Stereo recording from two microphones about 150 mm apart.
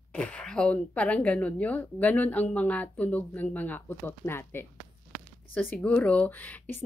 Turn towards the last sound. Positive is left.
turn(degrees=10)  # may be behind; listen again after turning